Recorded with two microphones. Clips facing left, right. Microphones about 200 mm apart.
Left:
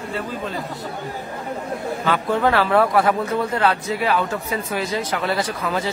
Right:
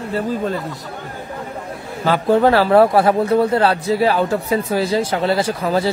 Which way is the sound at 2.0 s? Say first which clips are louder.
Right 6 dB; 35° right (ahead or behind).